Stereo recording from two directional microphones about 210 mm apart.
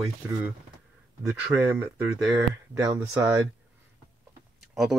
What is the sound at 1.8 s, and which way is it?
Speech, 10° right (ahead or behind).